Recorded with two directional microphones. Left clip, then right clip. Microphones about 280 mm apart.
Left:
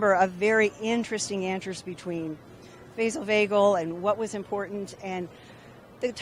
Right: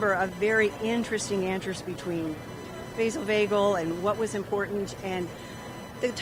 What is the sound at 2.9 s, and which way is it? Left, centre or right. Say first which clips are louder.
A woman's voice: left 1 dB; left.